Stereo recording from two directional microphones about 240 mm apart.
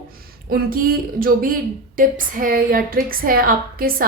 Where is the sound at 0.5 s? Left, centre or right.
Right.